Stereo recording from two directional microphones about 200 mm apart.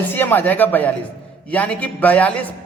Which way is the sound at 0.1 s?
10° left (ahead or behind).